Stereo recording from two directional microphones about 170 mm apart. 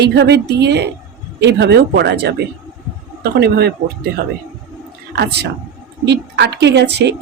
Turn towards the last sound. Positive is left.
turn(degrees=-85)